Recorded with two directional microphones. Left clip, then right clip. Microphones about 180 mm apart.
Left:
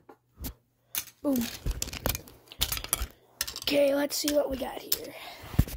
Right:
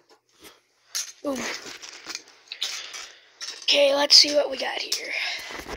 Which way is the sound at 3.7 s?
20° left (ahead or behind).